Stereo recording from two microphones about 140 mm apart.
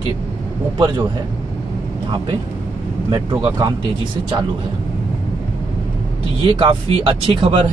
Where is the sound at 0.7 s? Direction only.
30° right (ahead or behind).